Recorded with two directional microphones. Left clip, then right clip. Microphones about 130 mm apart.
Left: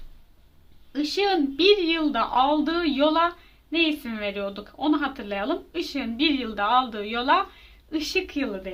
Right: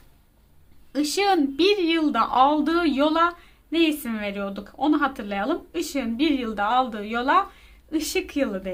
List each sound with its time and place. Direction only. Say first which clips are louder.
0.9 s a woman's voice: right 2 dB; 35° right (ahead or behind)